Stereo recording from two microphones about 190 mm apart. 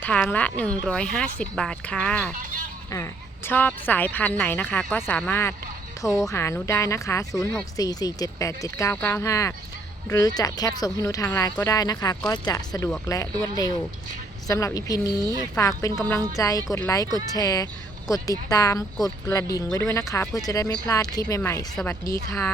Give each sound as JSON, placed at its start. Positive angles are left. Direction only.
{"t": 0.0, "sound": "a woman's voice", "side_deg": 5}
{"t": 2.3, "sound": "a sound", "side_deg": -45}
{"t": 2.9, "sound": "a woman's voice", "side_deg": 15}
{"t": 14.4, "sound": "speech", "side_deg": 15}
{"t": 15.2, "sound": "speech", "side_deg": -20}
{"t": 15.5, "sound": "a woman's voice", "side_deg": 15}